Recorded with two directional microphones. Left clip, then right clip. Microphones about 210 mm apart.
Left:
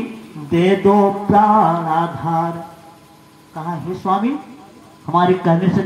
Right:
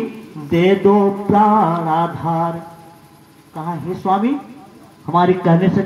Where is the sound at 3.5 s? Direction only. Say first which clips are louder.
Right 1 dB; 25° right (ahead or behind).